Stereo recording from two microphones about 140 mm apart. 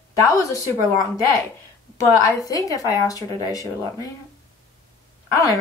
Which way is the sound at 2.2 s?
25° left (ahead or behind).